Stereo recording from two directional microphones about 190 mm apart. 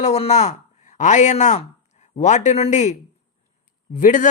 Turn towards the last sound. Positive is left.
turn(degrees=40)  # may be behind; listen again after turning